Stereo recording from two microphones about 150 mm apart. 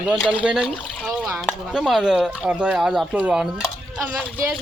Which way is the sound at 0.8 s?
5° left (ahead or behind).